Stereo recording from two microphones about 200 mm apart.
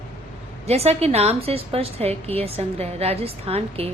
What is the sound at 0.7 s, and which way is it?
A woman's voice, 30° right (ahead or behind).